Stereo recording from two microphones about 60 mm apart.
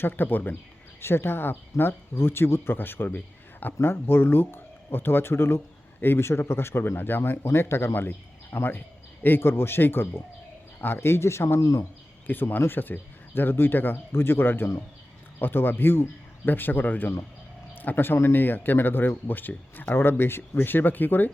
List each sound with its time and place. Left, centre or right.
0.0 s speech: left
3.2 s a sound: left
3.8 s speech: left
11.6 s speech: left
12.3 s speech: left